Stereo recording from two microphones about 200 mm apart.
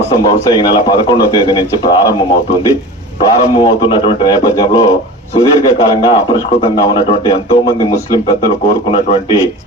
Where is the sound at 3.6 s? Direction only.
25° left (ahead or behind).